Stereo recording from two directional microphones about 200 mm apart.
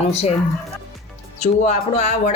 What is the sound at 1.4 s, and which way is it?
Speech, 35° left (ahead or behind).